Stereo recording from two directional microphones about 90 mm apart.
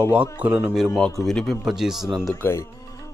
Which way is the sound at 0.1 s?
15° right (ahead or behind).